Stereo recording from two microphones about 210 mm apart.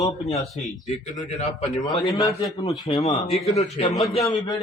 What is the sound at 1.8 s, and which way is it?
Speech, 20° left (ahead or behind).